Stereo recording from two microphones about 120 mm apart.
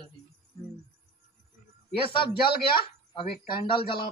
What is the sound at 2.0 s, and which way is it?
A man's voice, 45° left (ahead or behind).